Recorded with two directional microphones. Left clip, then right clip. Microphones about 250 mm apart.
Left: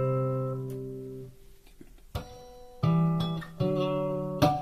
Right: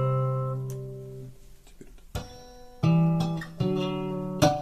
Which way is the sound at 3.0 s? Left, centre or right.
Left.